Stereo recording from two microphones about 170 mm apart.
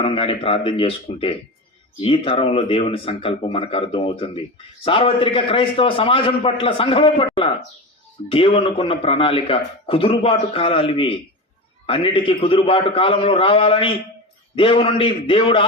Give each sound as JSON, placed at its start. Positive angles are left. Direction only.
{"t": 0.0, "sound": "a man's voice", "side_deg": 35}